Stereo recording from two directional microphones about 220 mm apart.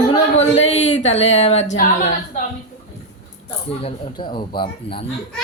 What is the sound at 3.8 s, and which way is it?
A man's voice, 25° left (ahead or behind).